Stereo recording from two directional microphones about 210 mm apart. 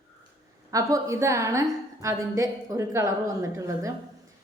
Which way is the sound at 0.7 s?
15° right (ahead or behind).